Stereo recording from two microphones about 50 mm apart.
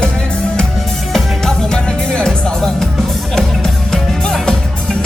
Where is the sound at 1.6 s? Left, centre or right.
Centre.